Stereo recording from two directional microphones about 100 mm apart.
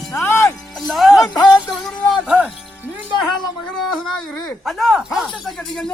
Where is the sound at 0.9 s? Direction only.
Centre (ahead or behind).